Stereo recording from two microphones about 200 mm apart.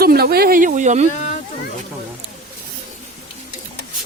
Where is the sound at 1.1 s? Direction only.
35° left (ahead or behind).